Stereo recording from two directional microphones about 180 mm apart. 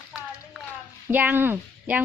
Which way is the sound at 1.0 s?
10° right (ahead or behind).